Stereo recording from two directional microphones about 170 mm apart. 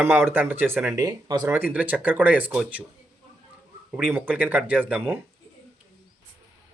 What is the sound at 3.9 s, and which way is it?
Speech, 10° right (ahead or behind).